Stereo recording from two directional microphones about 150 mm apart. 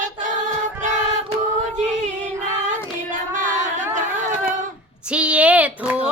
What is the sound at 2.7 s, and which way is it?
Child singing, 60° right (ahead or behind).